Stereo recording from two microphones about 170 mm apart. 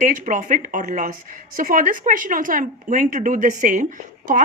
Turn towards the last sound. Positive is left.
turn(degrees=-50)  # may be behind; listen again after turning